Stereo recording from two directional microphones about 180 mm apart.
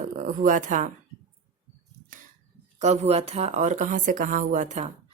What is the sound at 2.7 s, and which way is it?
A woman's voice, 40° right (ahead or behind).